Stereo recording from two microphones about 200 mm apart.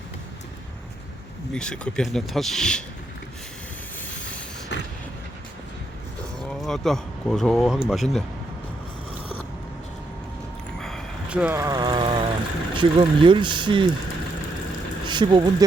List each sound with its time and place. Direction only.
1.5 s speech: 5° left (ahead or behind)
4.7 s vehicle: 60° left (ahead or behind)
6.5 s speech: centre (ahead or behind)
10.8 s vehicle: centre (ahead or behind); by 12.3 s 25° right (ahead or behind)
12.7 s speech: 25° right (ahead or behind)
15.0 s a sound: 20° right (ahead or behind)